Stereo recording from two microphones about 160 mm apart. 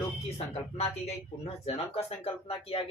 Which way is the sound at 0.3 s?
40° left (ahead or behind).